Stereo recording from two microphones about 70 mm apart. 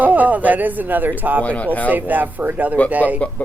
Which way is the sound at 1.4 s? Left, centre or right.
Centre.